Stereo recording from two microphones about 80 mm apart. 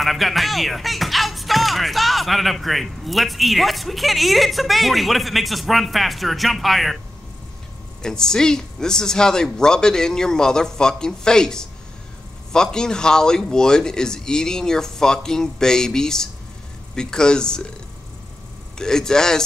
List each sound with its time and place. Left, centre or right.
0.0 s speech: centre
8.0 s speech: centre
18.8 s speech: centre